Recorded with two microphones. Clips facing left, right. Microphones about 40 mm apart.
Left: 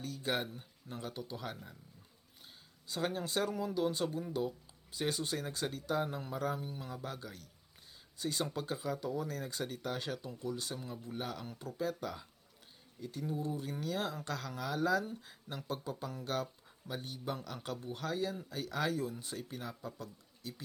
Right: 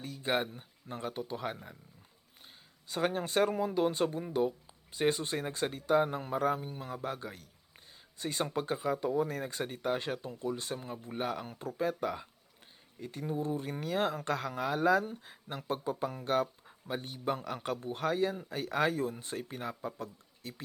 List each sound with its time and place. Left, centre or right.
0.0 s speech: right
2.9 s speech: right